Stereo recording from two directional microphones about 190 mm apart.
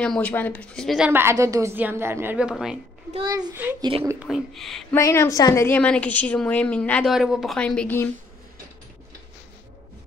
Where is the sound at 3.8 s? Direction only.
30° right (ahead or behind).